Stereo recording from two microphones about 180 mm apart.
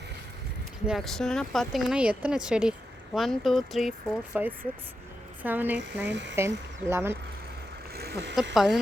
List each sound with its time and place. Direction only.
0.9 s speech: centre (ahead or behind)
5.4 s speech: 10° right (ahead or behind)
7.9 s a sound: 65° right (ahead or behind)
8.5 s speech: centre (ahead or behind)